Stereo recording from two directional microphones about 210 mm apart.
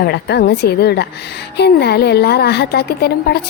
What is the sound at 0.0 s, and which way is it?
A woman's voice, 50° left (ahead or behind).